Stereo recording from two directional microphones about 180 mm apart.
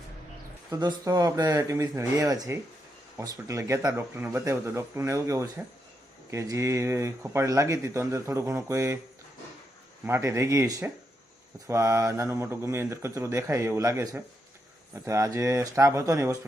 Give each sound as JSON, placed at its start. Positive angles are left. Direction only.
{"t": 0.7, "sound": "speech", "side_deg": -20}
{"t": 10.1, "sound": "speech", "side_deg": -15}